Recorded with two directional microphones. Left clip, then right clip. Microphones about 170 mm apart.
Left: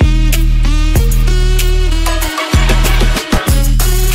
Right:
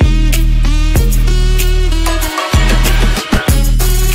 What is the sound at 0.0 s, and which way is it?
Music, centre (ahead or behind).